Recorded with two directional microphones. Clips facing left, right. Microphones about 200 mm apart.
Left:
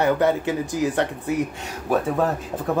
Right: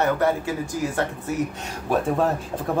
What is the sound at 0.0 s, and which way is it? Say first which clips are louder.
Speech: left 2 dB; 20° left (ahead or behind).